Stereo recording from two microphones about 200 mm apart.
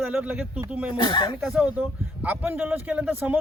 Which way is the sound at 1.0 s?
20° left (ahead or behind).